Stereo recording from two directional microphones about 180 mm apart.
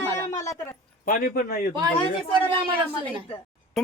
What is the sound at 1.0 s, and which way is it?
Speech, 50° left (ahead or behind).